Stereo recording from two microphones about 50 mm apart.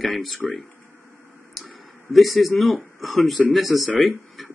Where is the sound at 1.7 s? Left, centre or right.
Centre.